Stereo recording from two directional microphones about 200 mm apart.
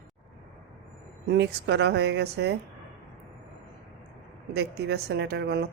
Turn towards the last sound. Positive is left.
turn(degrees=-55)  # may be behind; listen again after turning